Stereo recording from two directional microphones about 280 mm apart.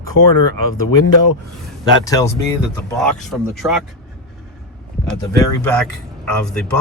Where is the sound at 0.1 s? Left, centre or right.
Left.